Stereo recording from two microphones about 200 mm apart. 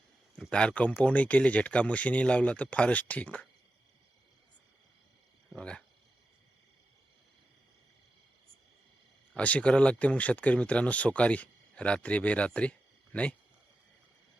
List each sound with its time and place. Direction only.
0.3 s speech: 5° left (ahead or behind)
5.5 s a sound: 5° left (ahead or behind)
9.3 s speech: 5° left (ahead or behind)